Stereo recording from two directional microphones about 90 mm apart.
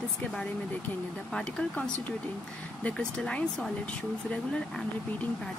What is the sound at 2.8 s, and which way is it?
Speech, 10° left (ahead or behind).